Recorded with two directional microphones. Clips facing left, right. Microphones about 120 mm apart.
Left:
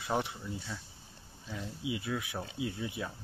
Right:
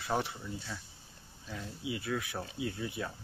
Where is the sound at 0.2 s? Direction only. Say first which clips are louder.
Even; 15° left (ahead or behind).